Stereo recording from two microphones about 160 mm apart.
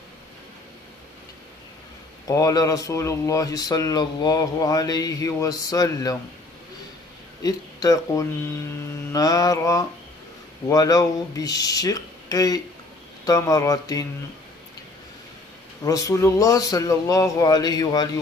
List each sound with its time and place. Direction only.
2.2 s speech: 20° left (ahead or behind)
7.4 s speech: 20° left (ahead or behind)
15.8 s speech: 20° left (ahead or behind)